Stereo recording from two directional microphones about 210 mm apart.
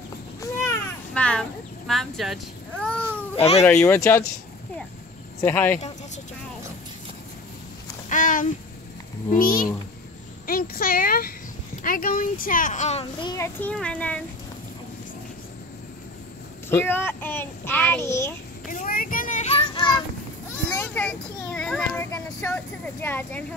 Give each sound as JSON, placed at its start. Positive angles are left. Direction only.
{"t": 0.4, "sound": "a sound", "side_deg": 10}
{"t": 3.8, "sound": "a child's voice", "side_deg": 10}
{"t": 5.4, "sound": "a child's voice", "side_deg": 10}
{"t": 8.1, "sound": "a sound", "side_deg": 40}
{"t": 9.3, "sound": "a child's voice", "side_deg": 45}
{"t": 10.4, "sound": "a sound", "side_deg": 45}
{"t": 11.8, "sound": "a child's voice", "side_deg": 40}
{"t": 13.6, "sound": "a child's voice", "side_deg": 5}
{"t": 16.6, "sound": "a child's voice", "side_deg": 10}
{"t": 18.7, "sound": "child singing", "side_deg": 40}
{"t": 20.7, "sound": "a child's voice", "side_deg": 10}